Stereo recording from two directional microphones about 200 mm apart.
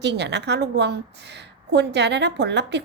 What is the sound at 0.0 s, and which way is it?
A woman's voice, 60° right (ahead or behind).